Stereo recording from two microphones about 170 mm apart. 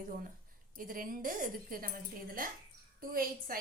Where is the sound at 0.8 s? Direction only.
55° right (ahead or behind).